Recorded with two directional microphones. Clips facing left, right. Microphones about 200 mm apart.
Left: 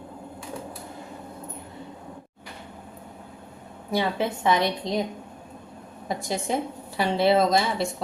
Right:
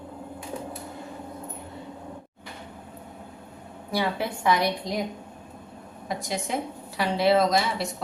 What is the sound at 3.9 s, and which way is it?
A woman's voice, 20° left (ahead or behind).